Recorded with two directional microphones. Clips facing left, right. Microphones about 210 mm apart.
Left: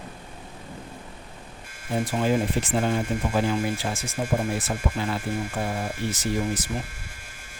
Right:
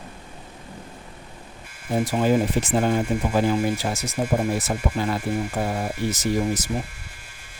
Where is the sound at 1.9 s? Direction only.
50° right (ahead or behind).